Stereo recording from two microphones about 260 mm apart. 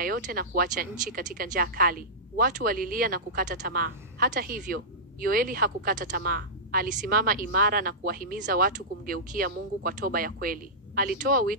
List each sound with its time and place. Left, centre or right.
0.0 s speech: right